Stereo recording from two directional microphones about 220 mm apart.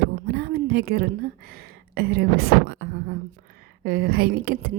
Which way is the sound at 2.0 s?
45° right (ahead or behind).